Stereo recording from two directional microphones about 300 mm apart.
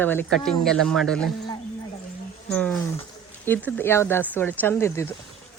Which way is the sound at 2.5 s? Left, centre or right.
Centre.